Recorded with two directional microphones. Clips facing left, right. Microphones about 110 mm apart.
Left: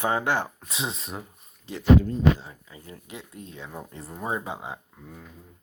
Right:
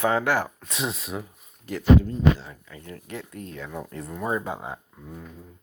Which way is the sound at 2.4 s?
25° left (ahead or behind).